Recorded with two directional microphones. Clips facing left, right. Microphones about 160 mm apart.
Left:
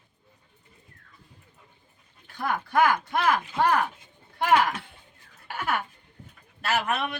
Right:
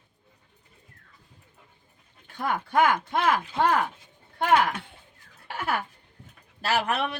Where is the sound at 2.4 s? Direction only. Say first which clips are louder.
Even; 25° right (ahead or behind).